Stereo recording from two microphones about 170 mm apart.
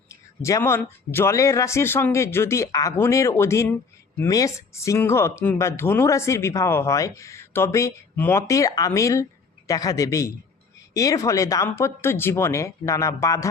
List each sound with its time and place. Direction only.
0.1 s a man's voice: 20° left (ahead or behind)